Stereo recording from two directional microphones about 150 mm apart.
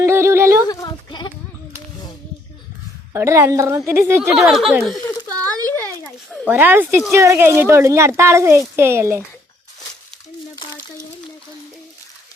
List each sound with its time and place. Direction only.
0.0 s a sound: 15° right (ahead or behind)
0.7 s sheep: 25° left (ahead or behind)
3.1 s speech: 20° right (ahead or behind)
4.4 s speech: centre (ahead or behind)
5.3 s a sound: 25° right (ahead or behind)
6.4 s speech: 15° right (ahead or behind)